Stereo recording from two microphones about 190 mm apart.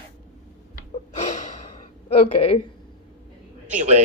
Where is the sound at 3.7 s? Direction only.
40° right (ahead or behind).